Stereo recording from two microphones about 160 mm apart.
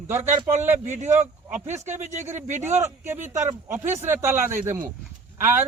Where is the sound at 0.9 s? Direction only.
50° right (ahead or behind).